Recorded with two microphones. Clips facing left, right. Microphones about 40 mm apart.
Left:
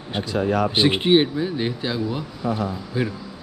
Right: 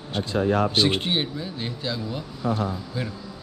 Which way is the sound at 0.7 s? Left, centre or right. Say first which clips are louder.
Left 6 dB; centre.